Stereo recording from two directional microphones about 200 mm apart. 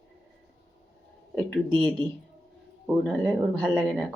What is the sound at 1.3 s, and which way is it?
Speech, 5° left (ahead or behind).